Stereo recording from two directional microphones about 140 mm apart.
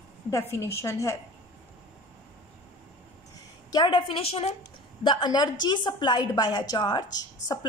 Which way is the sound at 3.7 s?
35° left (ahead or behind).